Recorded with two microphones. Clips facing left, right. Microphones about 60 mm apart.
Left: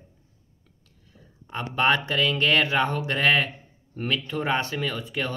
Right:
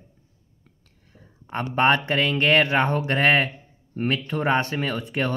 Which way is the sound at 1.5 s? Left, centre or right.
Right.